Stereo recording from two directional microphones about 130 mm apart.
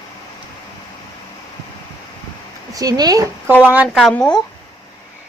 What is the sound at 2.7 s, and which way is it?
Speech, 30° right (ahead or behind).